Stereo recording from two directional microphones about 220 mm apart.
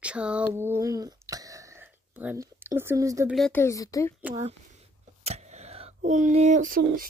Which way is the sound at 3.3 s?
Centre (ahead or behind).